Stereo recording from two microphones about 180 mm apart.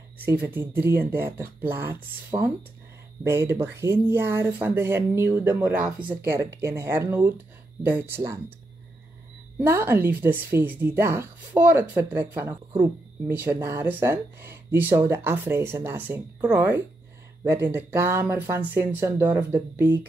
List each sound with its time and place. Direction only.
0.2 s speech: 10° right (ahead or behind)
9.6 s speech: 15° right (ahead or behind)